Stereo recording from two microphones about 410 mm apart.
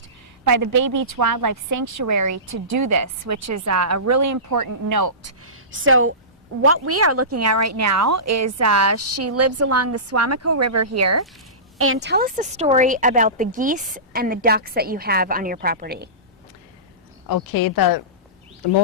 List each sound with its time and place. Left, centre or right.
0.4 s a woman's voice: right
5.5 s a woman's voice: right
11.9 s speech: right
17.2 s speech: left